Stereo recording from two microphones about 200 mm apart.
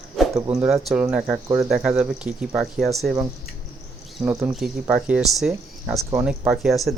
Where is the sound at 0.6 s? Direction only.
5° right (ahead or behind).